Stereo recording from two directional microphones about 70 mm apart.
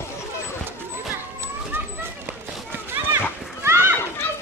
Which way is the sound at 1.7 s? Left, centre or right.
Right.